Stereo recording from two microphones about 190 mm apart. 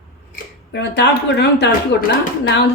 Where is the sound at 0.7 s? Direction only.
65° left (ahead or behind).